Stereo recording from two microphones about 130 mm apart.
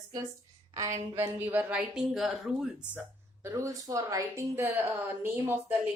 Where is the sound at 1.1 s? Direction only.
15° right (ahead or behind).